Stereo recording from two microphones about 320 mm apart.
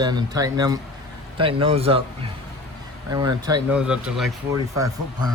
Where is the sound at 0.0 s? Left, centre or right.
Centre.